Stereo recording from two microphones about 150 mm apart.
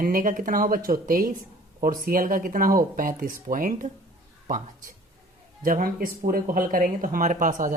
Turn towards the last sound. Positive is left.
turn(degrees=-60)  # may be behind; listen again after turning